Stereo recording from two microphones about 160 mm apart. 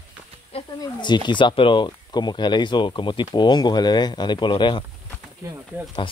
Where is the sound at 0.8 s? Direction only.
30° left (ahead or behind).